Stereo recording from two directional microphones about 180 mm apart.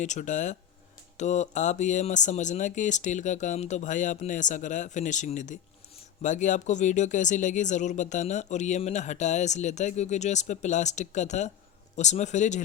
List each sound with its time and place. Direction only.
0.0 s speech: 40° left (ahead or behind)